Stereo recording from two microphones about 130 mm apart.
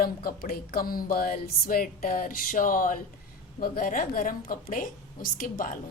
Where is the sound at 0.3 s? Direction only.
90° left.